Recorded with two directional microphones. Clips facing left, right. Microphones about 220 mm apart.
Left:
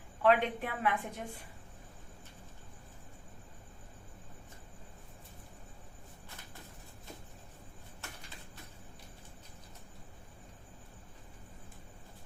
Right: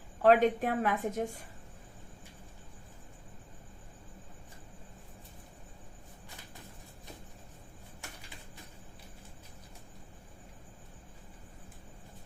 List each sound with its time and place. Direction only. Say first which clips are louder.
0.2 s a woman's voice: right 4 dB; 40° right (ahead or behind)